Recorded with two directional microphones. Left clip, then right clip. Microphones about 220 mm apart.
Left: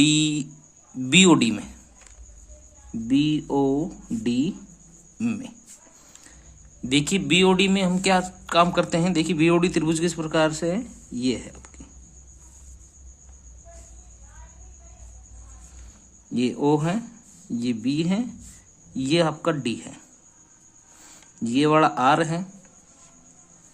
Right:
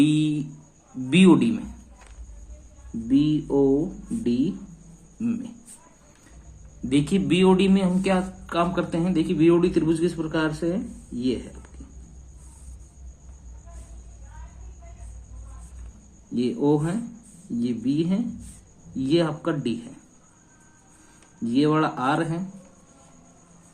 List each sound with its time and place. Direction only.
0.0 s speech: 45° left (ahead or behind)
3.1 s speech: 45° left (ahead or behind)
6.8 s speech: 40° left (ahead or behind)
16.3 s speech: 45° left (ahead or behind)
21.4 s speech: 45° left (ahead or behind)